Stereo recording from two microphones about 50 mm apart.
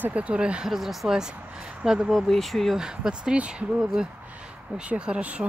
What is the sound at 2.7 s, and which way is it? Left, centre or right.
Speech, centre.